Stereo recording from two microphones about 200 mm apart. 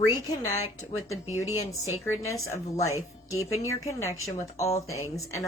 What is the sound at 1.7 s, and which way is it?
Speech, 15° left (ahead or behind).